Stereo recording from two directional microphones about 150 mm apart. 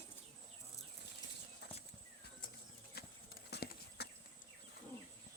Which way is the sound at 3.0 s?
90° left.